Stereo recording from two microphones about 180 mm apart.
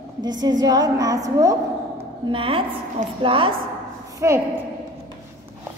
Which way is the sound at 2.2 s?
30° right (ahead or behind).